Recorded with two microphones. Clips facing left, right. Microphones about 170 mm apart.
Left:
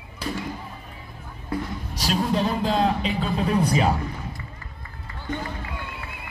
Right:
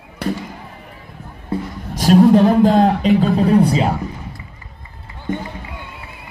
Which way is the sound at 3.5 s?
30° right (ahead or behind).